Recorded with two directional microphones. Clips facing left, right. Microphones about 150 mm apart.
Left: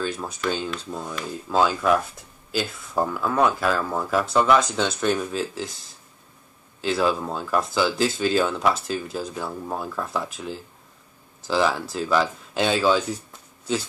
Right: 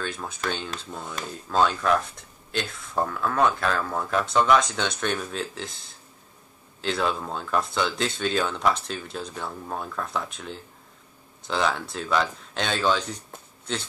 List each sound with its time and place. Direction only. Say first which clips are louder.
0.0 s speech: left 4 dB; centre (ahead or behind)